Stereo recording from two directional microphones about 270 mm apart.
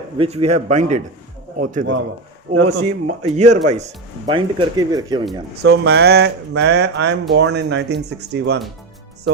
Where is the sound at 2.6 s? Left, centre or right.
Right.